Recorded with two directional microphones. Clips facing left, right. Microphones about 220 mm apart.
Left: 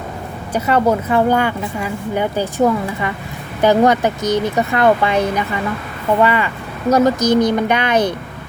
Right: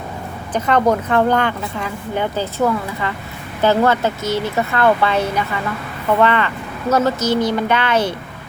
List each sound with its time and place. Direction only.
0.5 s speech: 10° left (ahead or behind)